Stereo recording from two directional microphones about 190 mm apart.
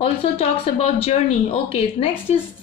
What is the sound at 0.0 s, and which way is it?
Speech, 30° left (ahead or behind).